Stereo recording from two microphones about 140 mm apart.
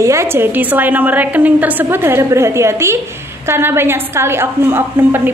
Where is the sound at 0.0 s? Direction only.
20° right (ahead or behind).